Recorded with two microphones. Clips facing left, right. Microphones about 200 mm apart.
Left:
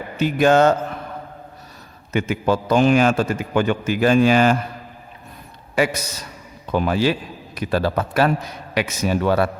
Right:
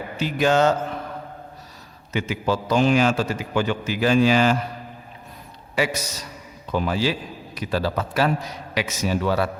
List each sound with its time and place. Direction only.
0.2 s a man's voice: 50° left (ahead or behind)
2.1 s a man's voice: 50° left (ahead or behind)
5.7 s a man's voice: 55° left (ahead or behind)